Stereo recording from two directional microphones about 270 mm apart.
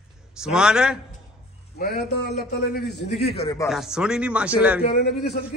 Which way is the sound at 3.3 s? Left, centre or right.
Left.